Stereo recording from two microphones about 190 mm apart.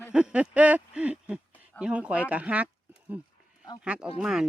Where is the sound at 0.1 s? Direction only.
5° right (ahead or behind).